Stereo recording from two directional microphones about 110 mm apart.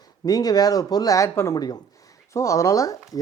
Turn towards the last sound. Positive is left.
turn(degrees=30)  # may be behind; listen again after turning